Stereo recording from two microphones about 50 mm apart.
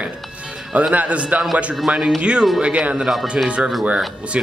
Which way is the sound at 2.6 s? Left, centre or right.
Centre.